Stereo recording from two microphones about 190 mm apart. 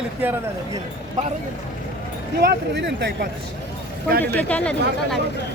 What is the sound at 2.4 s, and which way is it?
Speech, 65° right (ahead or behind).